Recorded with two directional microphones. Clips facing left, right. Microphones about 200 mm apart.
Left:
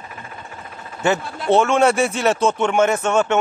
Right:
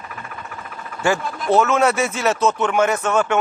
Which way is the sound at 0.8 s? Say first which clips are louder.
Even; 25° left (ahead or behind).